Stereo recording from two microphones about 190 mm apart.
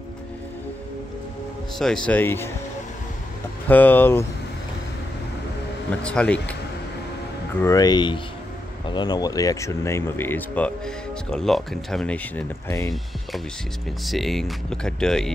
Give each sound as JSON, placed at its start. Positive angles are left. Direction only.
{"t": 1.8, "sound": "speech", "side_deg": 5}
{"t": 3.6, "sound": "speech", "side_deg": 10}
{"t": 6.0, "sound": "speech", "side_deg": 5}
{"t": 7.6, "sound": "speech", "side_deg": 20}
{"t": 14.0, "sound": "speech", "side_deg": 0}